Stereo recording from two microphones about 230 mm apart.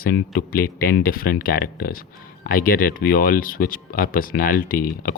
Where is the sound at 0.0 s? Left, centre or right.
Left.